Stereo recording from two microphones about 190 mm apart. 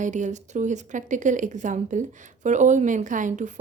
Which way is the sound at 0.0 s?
40° right (ahead or behind).